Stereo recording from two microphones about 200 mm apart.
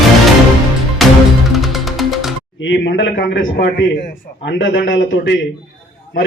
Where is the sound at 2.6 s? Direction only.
65° left (ahead or behind).